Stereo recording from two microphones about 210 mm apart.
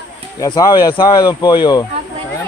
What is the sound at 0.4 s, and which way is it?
Speech, 20° left (ahead or behind).